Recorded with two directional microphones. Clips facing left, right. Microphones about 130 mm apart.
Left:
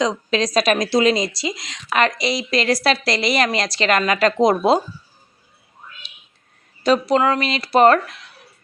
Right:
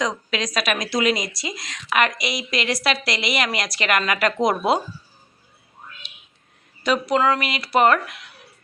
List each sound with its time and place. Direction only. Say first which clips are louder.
0.0 s speech: left 5 dB; 30° left (ahead or behind)
6.0 s whispering: even; 40° left (ahead or behind)
6.8 s speech: left 3 dB; 35° left (ahead or behind)